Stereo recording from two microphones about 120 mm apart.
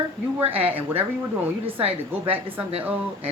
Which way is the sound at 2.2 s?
15° right (ahead or behind).